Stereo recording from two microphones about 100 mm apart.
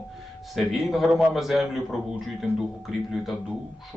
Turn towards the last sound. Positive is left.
turn(degrees=-5)  # may be behind; listen again after turning